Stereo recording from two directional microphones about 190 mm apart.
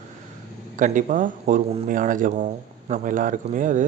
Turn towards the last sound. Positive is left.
turn(degrees=-45)  # may be behind; listen again after turning